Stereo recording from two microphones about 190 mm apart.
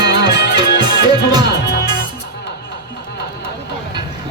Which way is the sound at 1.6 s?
60° left (ahead or behind).